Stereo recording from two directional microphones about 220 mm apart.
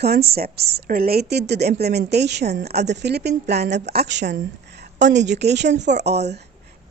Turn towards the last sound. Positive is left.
turn(degrees=-30)  # may be behind; listen again after turning